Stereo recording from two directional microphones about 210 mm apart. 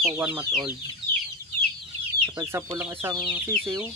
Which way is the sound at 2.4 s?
15° right (ahead or behind).